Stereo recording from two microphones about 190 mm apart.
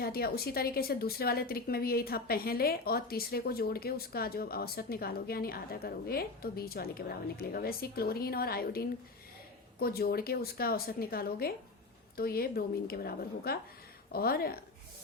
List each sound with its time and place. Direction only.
0.0 s a woman's voice: 55° left (ahead or behind)